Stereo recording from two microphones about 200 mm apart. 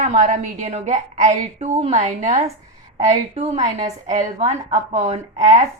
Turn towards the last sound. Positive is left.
turn(degrees=-35)  # may be behind; listen again after turning